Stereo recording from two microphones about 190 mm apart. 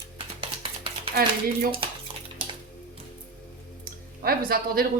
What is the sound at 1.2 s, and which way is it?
Speech, 50° right (ahead or behind).